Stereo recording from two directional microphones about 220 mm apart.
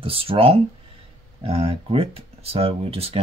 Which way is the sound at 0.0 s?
25° right (ahead or behind).